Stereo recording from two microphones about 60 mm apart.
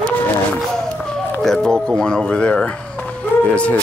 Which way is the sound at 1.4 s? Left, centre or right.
Centre.